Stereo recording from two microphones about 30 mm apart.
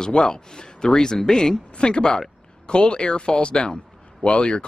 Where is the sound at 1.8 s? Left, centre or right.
Left.